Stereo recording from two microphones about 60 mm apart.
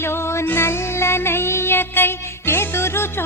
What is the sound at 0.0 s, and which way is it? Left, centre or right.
Music, left.